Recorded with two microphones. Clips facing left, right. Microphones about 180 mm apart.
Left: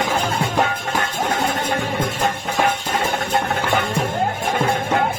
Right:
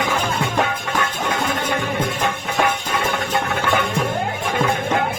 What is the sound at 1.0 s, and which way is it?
Music, 45° left (ahead or behind).